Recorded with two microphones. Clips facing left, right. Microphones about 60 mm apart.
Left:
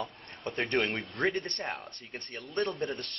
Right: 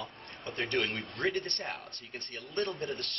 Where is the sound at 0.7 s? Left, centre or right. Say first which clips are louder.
Left 2 dB; left.